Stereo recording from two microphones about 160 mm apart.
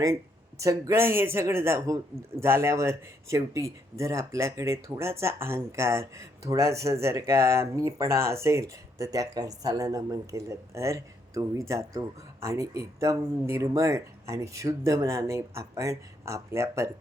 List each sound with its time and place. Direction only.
0.6 s speech: 20° right (ahead or behind)